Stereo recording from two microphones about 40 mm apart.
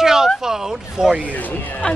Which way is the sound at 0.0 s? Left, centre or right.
Centre.